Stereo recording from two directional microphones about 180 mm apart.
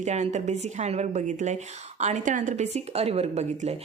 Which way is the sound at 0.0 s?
40° right (ahead or behind).